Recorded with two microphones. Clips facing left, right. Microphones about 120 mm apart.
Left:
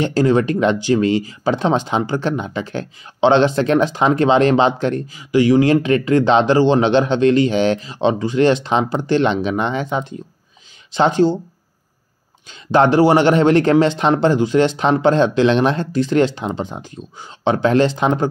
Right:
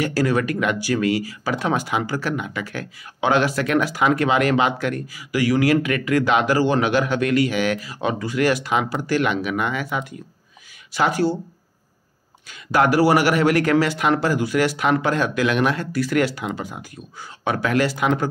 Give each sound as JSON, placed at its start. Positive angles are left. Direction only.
{"t": 0.0, "sound": "speech", "side_deg": 20}
{"t": 12.4, "sound": "speech", "side_deg": 25}